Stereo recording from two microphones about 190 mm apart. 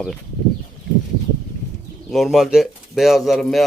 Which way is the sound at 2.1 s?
Centre (ahead or behind).